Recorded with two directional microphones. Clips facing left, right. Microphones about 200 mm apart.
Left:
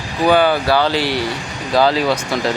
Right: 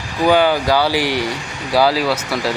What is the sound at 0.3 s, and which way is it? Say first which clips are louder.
Speech: even; 10° right (ahead or behind).